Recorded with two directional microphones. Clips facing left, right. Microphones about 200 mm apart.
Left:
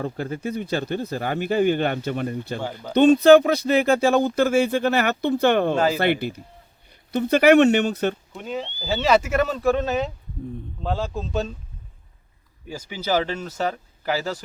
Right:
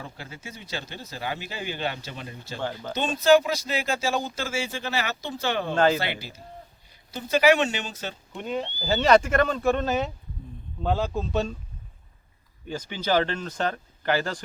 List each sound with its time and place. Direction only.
0.0 s speech: 50° left (ahead or behind)
5.7 s speech: 10° left (ahead or behind)
6.0 s speech: 55° left (ahead or behind)
8.3 s speech: centre (ahead or behind)
12.6 s speech: 10° left (ahead or behind)